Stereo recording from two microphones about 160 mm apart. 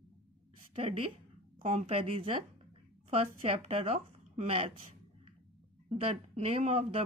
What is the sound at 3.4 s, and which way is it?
Speech, 40° right (ahead or behind).